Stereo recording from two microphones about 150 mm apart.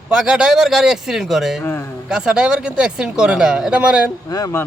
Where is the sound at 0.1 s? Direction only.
5° right (ahead or behind).